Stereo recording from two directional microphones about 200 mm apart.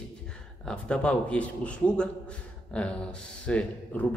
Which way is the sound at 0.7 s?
5° left (ahead or behind).